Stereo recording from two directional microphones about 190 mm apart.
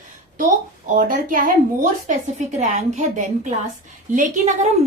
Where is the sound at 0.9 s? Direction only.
45° right (ahead or behind).